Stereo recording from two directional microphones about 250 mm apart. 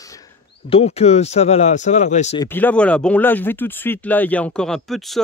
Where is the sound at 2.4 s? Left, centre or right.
Centre.